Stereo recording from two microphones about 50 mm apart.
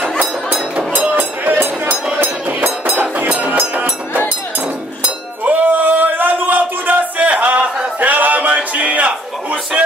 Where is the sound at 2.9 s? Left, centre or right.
Right.